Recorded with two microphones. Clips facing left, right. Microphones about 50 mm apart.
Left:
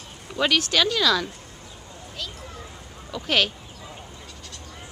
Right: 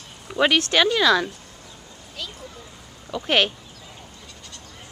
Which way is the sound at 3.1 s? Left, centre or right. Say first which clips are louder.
Right 2 dB; centre.